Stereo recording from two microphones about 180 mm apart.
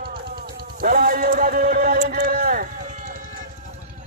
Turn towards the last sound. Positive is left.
turn(degrees=-45)  # may be behind; listen again after turning